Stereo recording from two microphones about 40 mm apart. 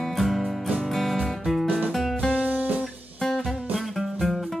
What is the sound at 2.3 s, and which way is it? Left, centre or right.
Music, right.